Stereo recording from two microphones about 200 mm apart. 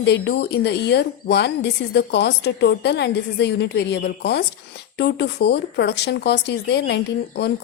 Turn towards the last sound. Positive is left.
turn(degrees=55)  # may be behind; listen again after turning